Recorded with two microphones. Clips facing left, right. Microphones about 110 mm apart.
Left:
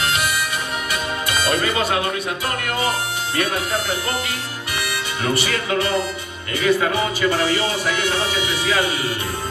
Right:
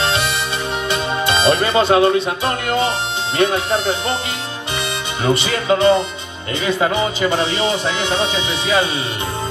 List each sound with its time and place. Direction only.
0.0 s music: 25° right (ahead or behind)
3.3 s speech: 25° right (ahead or behind)